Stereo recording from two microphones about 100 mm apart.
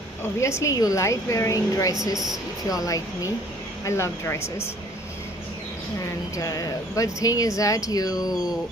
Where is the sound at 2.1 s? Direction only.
45° right (ahead or behind).